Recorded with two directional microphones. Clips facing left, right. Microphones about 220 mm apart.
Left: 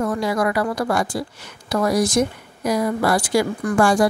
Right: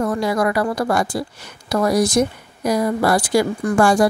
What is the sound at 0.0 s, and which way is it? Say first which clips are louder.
Speech: right 2 dB; 40° right (ahead or behind).